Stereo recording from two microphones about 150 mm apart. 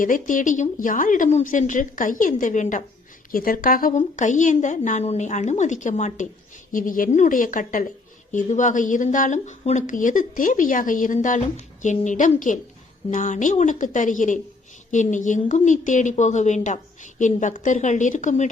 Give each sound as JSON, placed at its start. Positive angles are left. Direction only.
{"t": 0.0, "sound": "a woman's voice", "side_deg": 60}
{"t": 3.3, "sound": "a woman's voice", "side_deg": 70}
{"t": 6.7, "sound": "a woman's voice", "side_deg": 65}